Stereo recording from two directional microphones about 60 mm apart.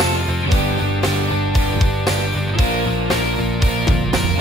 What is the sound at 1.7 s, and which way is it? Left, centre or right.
Music, centre.